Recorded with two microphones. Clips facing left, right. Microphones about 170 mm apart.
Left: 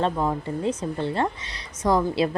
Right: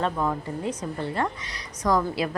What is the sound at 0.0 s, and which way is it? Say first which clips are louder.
A woman's voice: left 2 dB; 25° left (ahead or behind).